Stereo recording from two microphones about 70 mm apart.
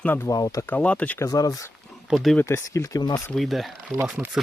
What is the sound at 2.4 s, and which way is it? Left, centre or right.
Speech, left.